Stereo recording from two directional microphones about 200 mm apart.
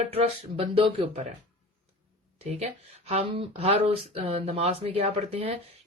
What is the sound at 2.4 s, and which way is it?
Speech, 30° right (ahead or behind).